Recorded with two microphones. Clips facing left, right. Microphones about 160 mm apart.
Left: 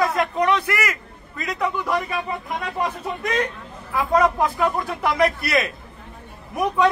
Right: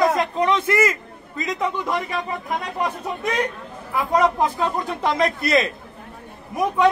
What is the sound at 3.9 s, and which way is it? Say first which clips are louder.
A man's voice: even; 20° right (ahead or behind).